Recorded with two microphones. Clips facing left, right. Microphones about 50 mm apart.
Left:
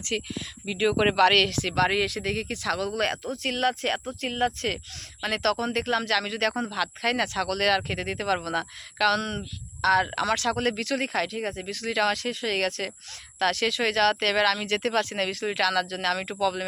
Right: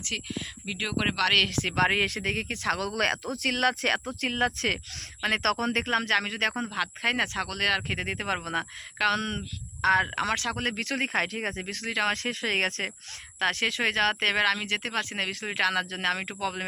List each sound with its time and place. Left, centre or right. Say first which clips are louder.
0.1 s speech: left 4 dB; centre
0.9 s speech: left 6 dB; centre
1.5 s speech: left 1 dB; right
7.4 s speech: left 3 dB; centre; by 11.3 s right
11.3 s speech: left 1 dB; right
11.9 s speech: left 3 dB; right
12.1 s speech: even; right
13.4 s speech: left 2 dB; right